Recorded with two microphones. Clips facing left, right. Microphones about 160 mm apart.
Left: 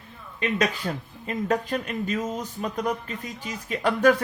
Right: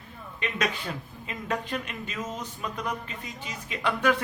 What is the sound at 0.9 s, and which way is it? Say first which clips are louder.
Speech: left 5 dB; 40° left (ahead or behind).